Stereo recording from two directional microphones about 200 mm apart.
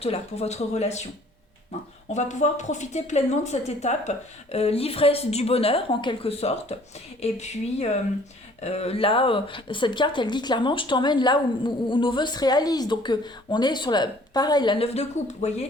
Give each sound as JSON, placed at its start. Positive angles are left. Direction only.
{"t": 0.0, "sound": "a woman's voice", "side_deg": 30}
{"t": 2.1, "sound": "a woman's voice", "side_deg": 35}